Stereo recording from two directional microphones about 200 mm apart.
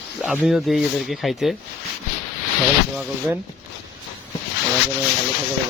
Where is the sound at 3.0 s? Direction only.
5° right (ahead or behind).